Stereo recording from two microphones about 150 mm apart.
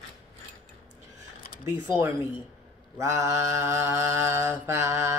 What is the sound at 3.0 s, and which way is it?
Mantra, 20° right (ahead or behind).